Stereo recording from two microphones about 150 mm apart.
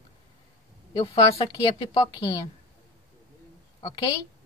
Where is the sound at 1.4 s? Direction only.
25° left (ahead or behind).